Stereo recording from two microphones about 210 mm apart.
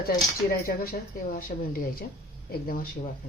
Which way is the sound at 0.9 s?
40° left (ahead or behind).